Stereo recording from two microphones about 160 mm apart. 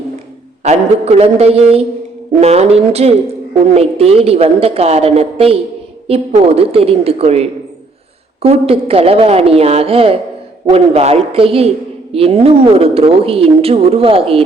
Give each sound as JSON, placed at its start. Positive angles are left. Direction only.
{"t": 0.6, "sound": "a woman's voice", "side_deg": -45}